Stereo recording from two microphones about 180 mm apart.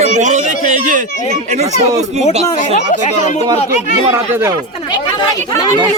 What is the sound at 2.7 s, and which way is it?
Speech, 40° left (ahead or behind).